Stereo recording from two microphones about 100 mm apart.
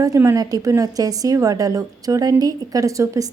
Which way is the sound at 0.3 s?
40° right (ahead or behind).